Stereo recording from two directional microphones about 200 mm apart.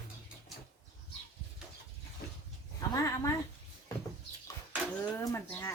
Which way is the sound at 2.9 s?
15° left (ahead or behind).